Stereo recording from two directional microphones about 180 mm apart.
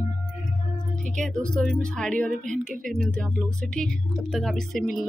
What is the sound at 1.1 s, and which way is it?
Speech, 5° left (ahead or behind).